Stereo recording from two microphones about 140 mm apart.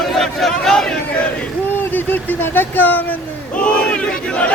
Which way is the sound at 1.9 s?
15° left (ahead or behind).